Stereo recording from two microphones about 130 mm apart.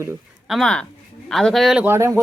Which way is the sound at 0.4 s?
Centre (ahead or behind).